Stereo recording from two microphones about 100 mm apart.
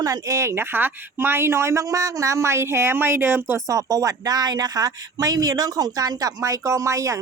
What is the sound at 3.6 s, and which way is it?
Speech, 35° right (ahead or behind).